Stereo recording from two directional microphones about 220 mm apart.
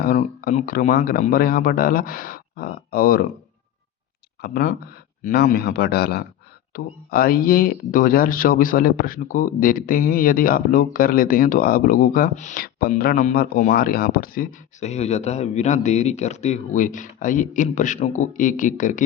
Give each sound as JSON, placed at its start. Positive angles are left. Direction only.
{"t": 0.0, "sound": "speech", "side_deg": 40}
{"t": 4.4, "sound": "speech", "side_deg": 45}